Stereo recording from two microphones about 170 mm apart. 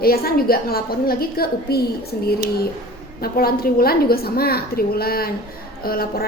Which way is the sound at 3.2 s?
60° left (ahead or behind).